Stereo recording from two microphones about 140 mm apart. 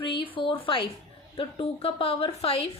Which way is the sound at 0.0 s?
40° left (ahead or behind).